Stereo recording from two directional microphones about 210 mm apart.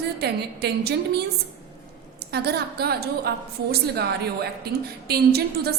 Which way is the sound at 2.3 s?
50° right (ahead or behind).